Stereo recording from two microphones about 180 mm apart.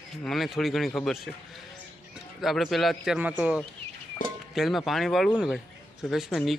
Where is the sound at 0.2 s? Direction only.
Centre (ahead or behind).